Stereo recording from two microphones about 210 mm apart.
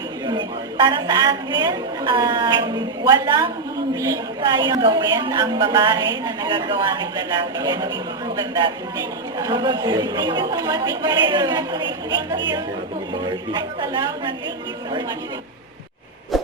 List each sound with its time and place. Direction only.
0.3 s a woman's voice: 20° right (ahead or behind)
9.4 s a woman's voice: 20° right (ahead or behind)
16.3 s a sound: centre (ahead or behind)